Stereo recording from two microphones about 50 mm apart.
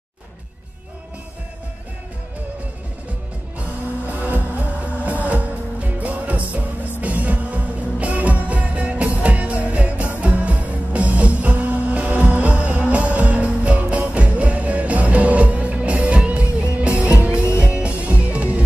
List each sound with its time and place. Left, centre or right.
4.1 s music: right